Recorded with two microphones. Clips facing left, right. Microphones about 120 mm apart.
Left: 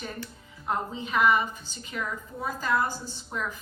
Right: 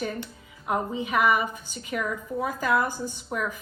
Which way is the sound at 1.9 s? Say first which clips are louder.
Right 6 dB; 65° right (ahead or behind).